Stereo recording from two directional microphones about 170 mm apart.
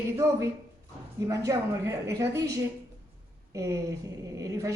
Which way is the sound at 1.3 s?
20° right (ahead or behind).